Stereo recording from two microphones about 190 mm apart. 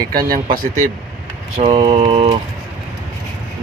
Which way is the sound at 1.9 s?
30° right (ahead or behind).